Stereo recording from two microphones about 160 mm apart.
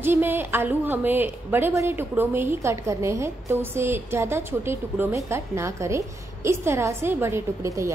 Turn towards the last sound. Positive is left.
turn(degrees=-20)  # may be behind; listen again after turning